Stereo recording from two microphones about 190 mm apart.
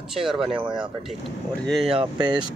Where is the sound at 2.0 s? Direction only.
25° right (ahead or behind).